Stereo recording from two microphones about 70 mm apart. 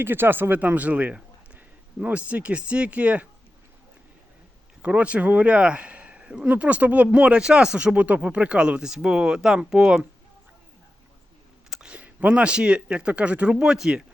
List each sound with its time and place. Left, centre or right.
0.0 s a man's voice: right
4.8 s speech: centre
11.7 s speech: centre